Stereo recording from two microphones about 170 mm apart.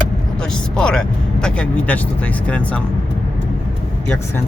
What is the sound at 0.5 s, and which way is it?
Speech, 5° left (ahead or behind).